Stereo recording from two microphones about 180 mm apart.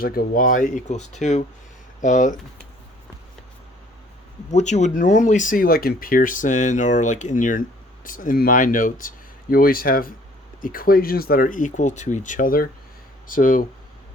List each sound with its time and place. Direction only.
0.0 s speech: 55° left (ahead or behind)
4.5 s speech: 40° left (ahead or behind)